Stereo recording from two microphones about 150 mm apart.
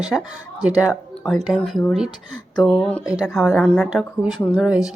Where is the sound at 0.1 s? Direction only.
Centre (ahead or behind).